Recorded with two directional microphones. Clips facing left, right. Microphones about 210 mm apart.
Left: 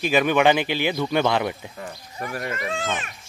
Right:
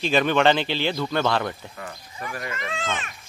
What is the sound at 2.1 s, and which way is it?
Speech, 40° left (ahead or behind).